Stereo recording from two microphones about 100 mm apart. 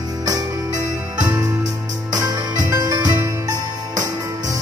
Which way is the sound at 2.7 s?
35° right (ahead or behind).